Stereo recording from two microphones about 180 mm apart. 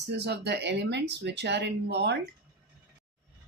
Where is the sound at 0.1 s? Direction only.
70° right (ahead or behind).